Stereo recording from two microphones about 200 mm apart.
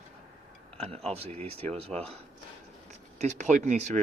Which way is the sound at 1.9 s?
5° left (ahead or behind).